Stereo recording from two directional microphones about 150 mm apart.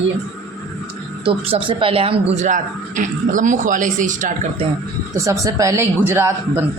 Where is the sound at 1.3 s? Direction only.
40° right (ahead or behind).